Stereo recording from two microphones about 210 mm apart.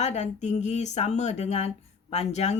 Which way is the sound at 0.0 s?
35° left (ahead or behind).